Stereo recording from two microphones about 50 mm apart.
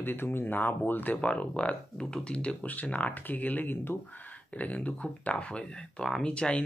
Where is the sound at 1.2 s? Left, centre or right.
Left.